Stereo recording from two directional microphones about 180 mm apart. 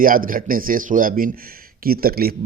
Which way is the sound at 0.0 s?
50° right (ahead or behind).